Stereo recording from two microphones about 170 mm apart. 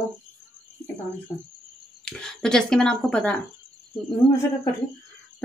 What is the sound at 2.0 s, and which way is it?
Speech, 5° left (ahead or behind).